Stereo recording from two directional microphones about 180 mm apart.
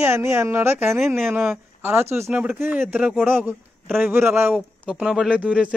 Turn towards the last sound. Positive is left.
turn(degrees=-5)  # may be behind; listen again after turning